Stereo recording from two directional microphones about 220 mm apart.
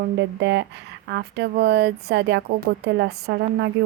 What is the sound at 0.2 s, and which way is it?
Speech, 55° right (ahead or behind).